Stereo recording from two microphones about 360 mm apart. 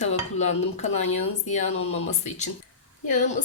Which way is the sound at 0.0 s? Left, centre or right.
Centre.